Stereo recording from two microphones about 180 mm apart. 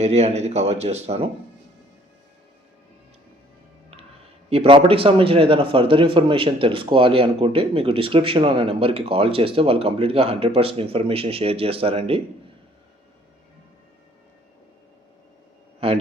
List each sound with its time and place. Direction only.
0.0 s a man's voice: 35° right (ahead or behind)
4.4 s a man's voice: 30° right (ahead or behind)
15.8 s a man's voice: 30° right (ahead or behind)